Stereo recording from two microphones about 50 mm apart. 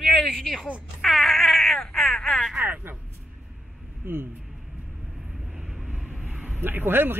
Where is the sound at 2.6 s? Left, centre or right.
Right.